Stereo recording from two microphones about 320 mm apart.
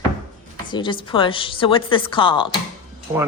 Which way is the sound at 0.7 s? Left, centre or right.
Centre.